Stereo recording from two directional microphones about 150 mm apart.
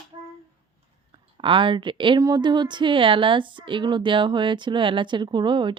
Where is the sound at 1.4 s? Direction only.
35° right (ahead or behind).